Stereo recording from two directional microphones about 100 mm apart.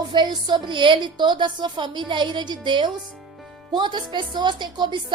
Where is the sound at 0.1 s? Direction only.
50° right (ahead or behind).